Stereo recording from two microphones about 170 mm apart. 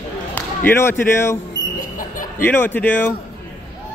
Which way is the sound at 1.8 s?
50° left (ahead or behind).